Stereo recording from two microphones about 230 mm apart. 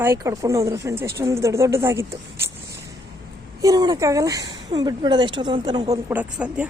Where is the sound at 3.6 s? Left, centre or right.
Centre.